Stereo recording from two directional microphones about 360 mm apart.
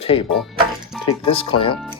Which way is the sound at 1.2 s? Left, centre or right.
Centre.